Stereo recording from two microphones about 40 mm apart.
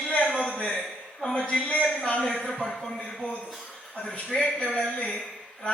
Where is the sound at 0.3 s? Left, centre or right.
Left.